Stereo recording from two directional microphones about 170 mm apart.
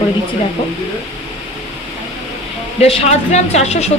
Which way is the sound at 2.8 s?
35° left (ahead or behind).